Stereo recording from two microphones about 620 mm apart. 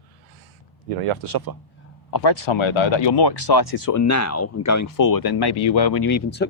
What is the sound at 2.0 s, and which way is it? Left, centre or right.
Speech, left.